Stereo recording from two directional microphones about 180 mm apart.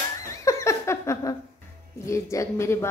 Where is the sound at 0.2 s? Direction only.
15° left (ahead or behind).